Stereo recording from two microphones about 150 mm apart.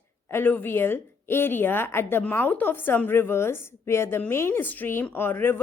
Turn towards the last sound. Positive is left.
turn(degrees=15)  # may be behind; listen again after turning